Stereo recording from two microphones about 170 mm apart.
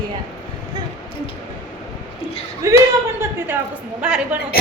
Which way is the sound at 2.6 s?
20° right (ahead or behind).